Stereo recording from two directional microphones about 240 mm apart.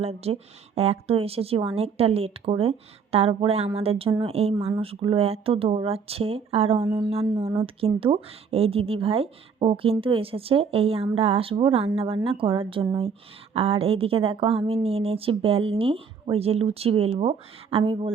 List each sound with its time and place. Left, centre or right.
0.0 s speech: right